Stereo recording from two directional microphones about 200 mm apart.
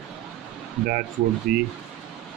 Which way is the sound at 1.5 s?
50° right (ahead or behind).